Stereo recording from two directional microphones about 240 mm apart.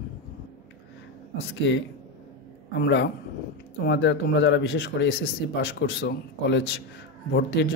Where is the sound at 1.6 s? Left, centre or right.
Left.